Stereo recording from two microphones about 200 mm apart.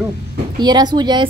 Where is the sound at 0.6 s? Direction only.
20° right (ahead or behind).